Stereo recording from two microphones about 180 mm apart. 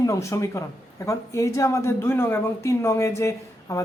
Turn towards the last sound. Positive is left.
turn(degrees=15)  # may be behind; listen again after turning